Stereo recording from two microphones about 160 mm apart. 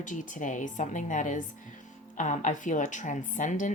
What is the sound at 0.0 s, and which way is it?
Speech, 55° left (ahead or behind).